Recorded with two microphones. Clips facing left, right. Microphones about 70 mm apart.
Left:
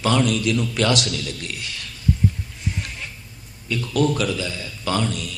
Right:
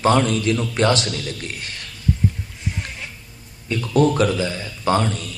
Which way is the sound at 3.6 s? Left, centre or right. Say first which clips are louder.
Right 3 dB; right.